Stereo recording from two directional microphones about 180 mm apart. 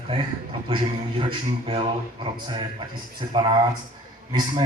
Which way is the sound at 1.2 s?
30° right (ahead or behind).